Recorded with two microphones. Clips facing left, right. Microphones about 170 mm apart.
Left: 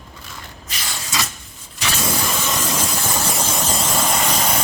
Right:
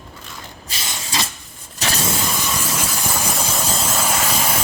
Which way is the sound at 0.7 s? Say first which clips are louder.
Even; 25° right (ahead or behind).